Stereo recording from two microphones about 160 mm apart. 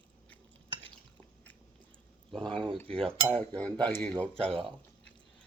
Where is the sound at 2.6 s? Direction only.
35° right (ahead or behind).